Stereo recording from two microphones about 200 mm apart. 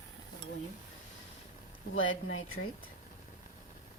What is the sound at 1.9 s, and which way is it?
Speech, 75° left (ahead or behind).